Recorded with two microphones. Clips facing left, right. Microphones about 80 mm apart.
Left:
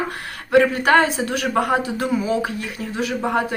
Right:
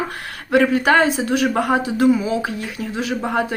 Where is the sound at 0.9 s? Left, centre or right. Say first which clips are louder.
Right 1 dB; right.